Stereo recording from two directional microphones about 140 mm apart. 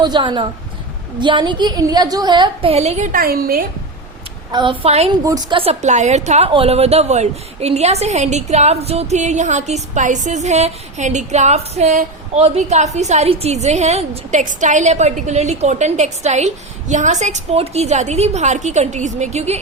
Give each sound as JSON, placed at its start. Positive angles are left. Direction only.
{"t": 0.0, "sound": "a woman's voice", "side_deg": -35}
{"t": 3.1, "sound": "a woman's voice", "side_deg": -90}
{"t": 4.5, "sound": "a woman's voice", "side_deg": -35}
{"t": 5.2, "sound": "a woman's voice", "side_deg": -25}
{"t": 5.5, "sound": "a woman's voice", "side_deg": -50}
{"t": 6.5, "sound": "a woman's voice", "side_deg": -45}